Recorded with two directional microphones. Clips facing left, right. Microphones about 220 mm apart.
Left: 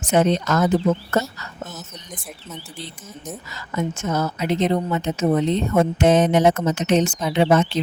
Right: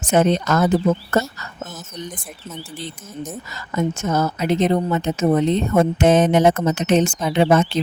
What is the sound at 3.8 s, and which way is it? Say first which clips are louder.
Speech: right 3 dB; 45° right (ahead or behind).